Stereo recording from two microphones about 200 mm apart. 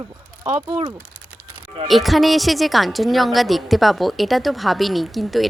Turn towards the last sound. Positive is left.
turn(degrees=0)  # may be behind; listen again after turning